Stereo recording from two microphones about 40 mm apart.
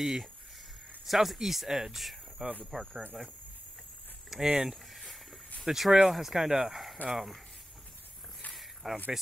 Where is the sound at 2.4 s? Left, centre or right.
Right.